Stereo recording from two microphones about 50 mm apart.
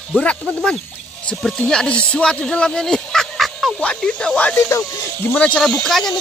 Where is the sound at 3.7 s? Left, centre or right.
Left.